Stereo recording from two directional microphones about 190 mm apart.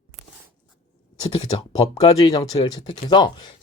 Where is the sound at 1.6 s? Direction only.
20° left (ahead or behind).